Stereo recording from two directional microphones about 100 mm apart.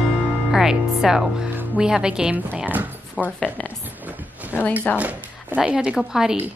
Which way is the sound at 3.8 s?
15° right (ahead or behind).